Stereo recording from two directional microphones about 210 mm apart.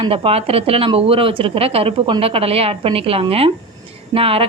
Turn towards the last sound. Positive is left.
turn(degrees=-25)  # may be behind; listen again after turning